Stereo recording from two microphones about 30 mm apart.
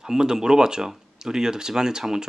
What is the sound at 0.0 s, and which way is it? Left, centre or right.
Speech, right.